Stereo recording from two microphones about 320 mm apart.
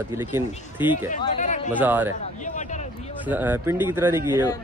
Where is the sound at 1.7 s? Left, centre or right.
Centre.